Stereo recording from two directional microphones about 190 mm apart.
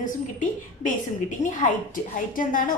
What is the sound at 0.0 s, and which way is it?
A woman's voice, 45° left (ahead or behind).